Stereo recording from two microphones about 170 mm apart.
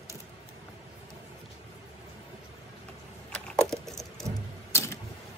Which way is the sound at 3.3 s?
Centre (ahead or behind).